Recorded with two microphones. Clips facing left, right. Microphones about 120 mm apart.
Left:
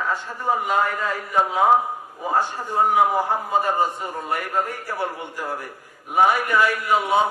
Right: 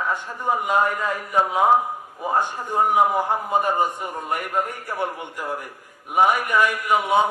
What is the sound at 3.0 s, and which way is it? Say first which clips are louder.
A man's voice: even; 20° right (ahead or behind).